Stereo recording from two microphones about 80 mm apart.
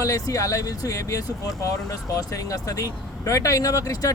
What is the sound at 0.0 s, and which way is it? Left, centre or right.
Speech, left.